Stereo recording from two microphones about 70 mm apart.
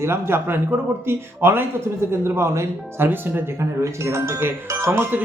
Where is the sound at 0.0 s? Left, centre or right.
Right.